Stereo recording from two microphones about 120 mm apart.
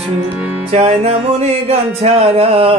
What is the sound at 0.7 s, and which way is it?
Music, 60° right (ahead or behind).